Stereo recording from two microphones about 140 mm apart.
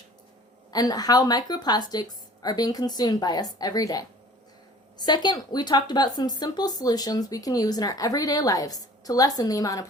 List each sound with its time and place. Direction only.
0.7 s speech: 25° left (ahead or behind)